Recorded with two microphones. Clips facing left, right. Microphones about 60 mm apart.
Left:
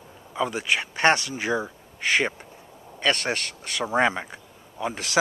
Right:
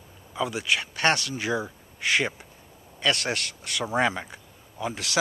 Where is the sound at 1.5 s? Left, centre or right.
Centre.